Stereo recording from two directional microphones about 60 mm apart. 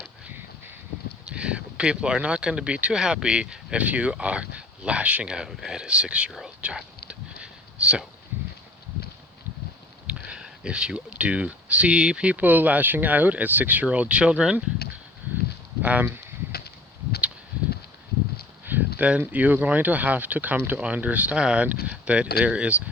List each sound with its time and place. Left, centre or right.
1.3 s speech: centre
5.5 s speech: centre
7.1 s a sound: centre
10.1 s speech: centre
15.8 s speech: right
18.6 s a sound: right
19.2 s speech: right